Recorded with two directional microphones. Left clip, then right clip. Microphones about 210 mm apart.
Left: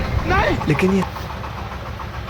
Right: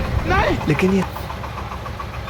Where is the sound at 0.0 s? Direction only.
Centre (ahead or behind).